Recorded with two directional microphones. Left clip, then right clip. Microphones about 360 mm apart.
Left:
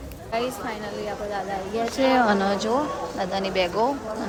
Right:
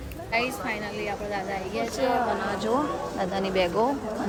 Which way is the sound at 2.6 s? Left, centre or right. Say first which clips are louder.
Left 2 dB; centre.